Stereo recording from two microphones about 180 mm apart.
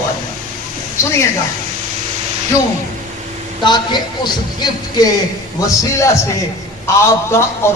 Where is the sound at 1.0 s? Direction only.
15° left (ahead or behind).